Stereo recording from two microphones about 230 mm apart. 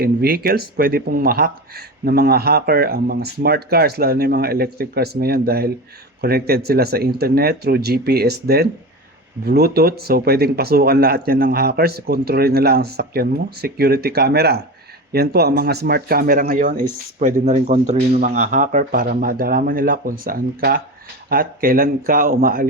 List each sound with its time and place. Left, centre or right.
0.0 s speech: right